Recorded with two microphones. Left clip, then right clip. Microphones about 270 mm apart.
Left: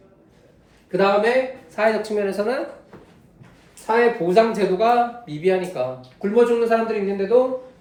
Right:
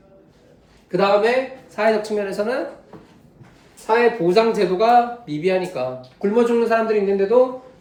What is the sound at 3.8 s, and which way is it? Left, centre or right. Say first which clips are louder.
A man's voice: right 1 dB; centre.